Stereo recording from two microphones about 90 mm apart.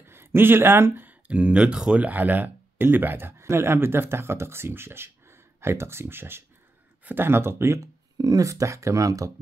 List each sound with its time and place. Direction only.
0.0 s speech: 25° right (ahead or behind)
8.2 s speech: 40° right (ahead or behind)